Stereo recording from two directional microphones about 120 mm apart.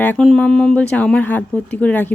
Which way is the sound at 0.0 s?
15° left (ahead or behind).